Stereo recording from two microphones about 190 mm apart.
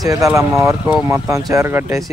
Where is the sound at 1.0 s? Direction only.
15° right (ahead or behind).